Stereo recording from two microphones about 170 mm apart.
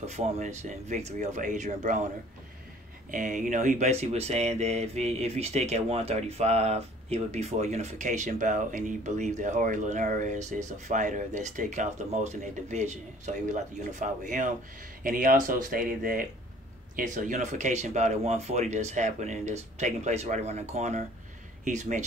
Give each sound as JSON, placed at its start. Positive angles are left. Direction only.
{"t": 0.0, "sound": "speech", "side_deg": -40}
{"t": 3.1, "sound": "speech", "side_deg": -50}